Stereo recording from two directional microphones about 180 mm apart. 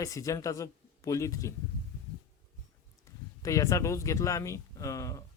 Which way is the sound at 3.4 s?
20° left (ahead or behind).